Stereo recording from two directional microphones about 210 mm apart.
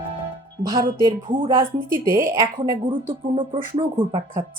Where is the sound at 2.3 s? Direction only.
20° right (ahead or behind).